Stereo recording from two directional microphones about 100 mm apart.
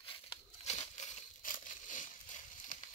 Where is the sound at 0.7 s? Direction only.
90° left.